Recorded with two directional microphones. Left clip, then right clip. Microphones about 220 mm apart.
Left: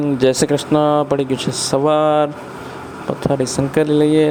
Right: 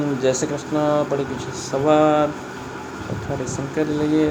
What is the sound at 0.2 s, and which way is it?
Speech, 40° left (ahead or behind).